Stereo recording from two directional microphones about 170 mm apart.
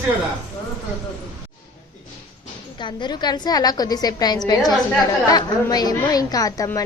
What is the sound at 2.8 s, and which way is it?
A woman's voice, 25° left (ahead or behind).